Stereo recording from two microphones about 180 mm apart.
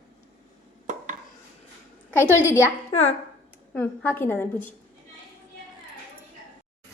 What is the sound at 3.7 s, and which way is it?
Speech, 10° left (ahead or behind).